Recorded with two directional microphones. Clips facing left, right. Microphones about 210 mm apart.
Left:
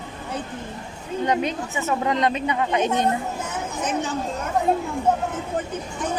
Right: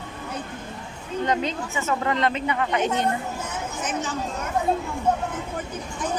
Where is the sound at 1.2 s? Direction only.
15° left (ahead or behind).